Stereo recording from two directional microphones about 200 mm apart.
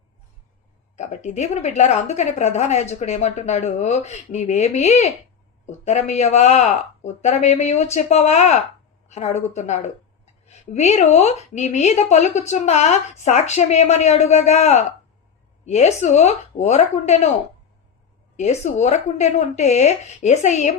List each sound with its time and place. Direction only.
0.9 s a woman's voice: 35° left (ahead or behind)
18.3 s a woman's voice: 35° left (ahead or behind)